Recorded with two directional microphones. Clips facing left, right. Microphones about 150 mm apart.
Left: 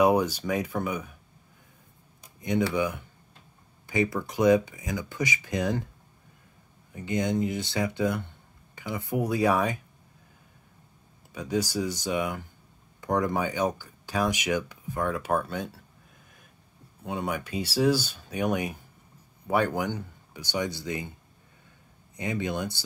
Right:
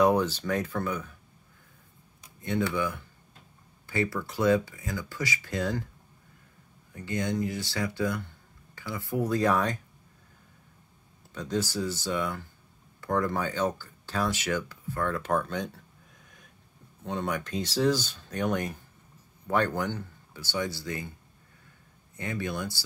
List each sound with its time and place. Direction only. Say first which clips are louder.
0.0 s speech: left 1 dB; 10° left (ahead or behind)
2.7 s speech: left 3 dB; 15° left (ahead or behind)
6.9 s speech: left 3 dB; 20° left (ahead or behind)
11.3 s speech: left 2 dB; 10° left (ahead or behind)
17.0 s speech: even; 10° left (ahead or behind)
22.1 s speech: left 3 dB; 15° left (ahead or behind)